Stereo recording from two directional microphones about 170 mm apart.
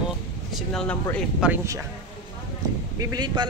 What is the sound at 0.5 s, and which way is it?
Speech, centre (ahead or behind).